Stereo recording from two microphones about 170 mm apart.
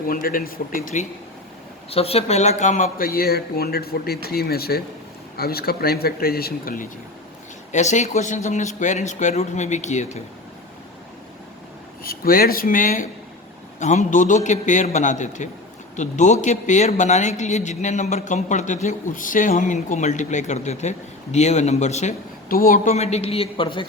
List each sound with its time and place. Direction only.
0.1 s speech: 55° left (ahead or behind)
1.9 s speech: 35° left (ahead or behind); by 6.8 s 60° left (ahead or behind)
7.7 s speech: 45° left (ahead or behind)
12.0 s speech: 60° left (ahead or behind); by 23.8 s 30° left (ahead or behind)